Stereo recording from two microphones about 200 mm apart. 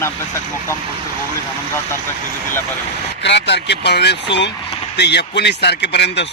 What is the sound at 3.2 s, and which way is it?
Speech, 60° left (ahead or behind).